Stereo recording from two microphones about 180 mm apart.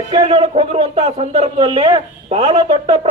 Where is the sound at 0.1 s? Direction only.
30° right (ahead or behind).